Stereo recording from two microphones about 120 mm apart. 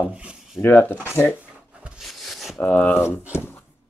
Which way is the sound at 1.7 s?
10° right (ahead or behind).